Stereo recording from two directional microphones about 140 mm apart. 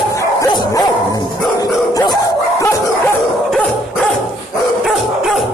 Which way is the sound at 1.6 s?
25° left (ahead or behind).